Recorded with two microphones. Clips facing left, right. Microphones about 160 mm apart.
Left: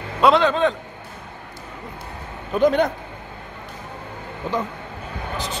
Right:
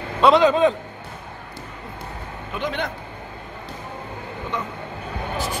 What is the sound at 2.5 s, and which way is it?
Speech, 40° left (ahead or behind).